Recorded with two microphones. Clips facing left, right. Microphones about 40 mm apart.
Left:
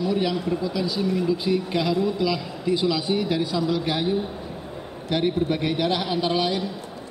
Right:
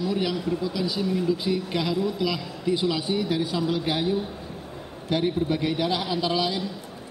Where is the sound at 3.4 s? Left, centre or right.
Right.